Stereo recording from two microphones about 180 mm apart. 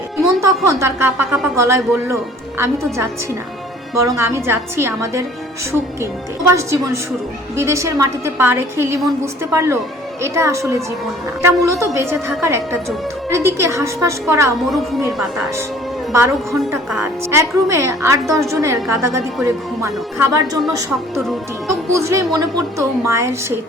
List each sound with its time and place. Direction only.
0.4 s a woman's voice: 15° right (ahead or behind)
3.9 s a woman's voice: 15° right (ahead or behind)
16.1 s a woman's voice: 15° right (ahead or behind)
21.9 s a woman's voice: 20° right (ahead or behind)